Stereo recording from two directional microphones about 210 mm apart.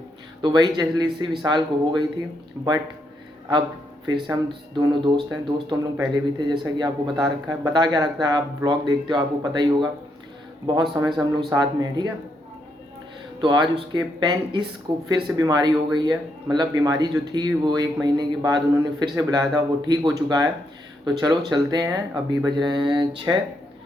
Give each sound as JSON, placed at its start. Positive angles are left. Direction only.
{"t": 0.4, "sound": "a man's voice", "side_deg": -20}
{"t": 4.0, "sound": "speech", "side_deg": -20}
{"t": 13.4, "sound": "a man's voice", "side_deg": -20}